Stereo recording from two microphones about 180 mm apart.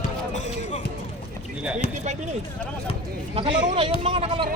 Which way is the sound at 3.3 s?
30° right (ahead or behind).